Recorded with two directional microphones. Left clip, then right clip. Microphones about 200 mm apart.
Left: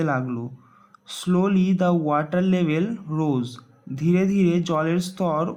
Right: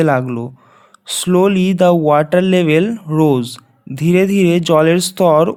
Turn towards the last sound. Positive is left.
turn(degrees=-45)  # may be behind; listen again after turning